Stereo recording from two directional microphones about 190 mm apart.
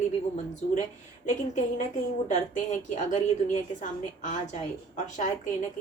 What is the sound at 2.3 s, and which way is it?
A woman's voice, 40° left (ahead or behind).